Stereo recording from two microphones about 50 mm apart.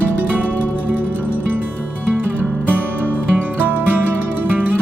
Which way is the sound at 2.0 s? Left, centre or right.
Right.